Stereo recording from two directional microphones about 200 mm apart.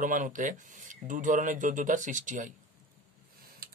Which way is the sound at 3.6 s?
50° right (ahead or behind).